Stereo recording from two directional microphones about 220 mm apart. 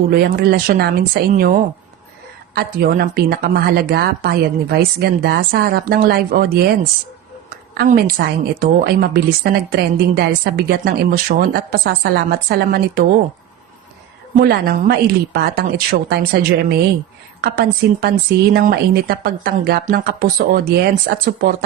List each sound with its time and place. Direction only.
0.1 s a woman's voice: 45° right (ahead or behind)
2.6 s a woman's voice: 45° right (ahead or behind)
7.5 s a sound: 45° right (ahead or behind)
8.5 s a woman's voice: 45° right (ahead or behind)
14.3 s a woman's voice: 45° right (ahead or behind)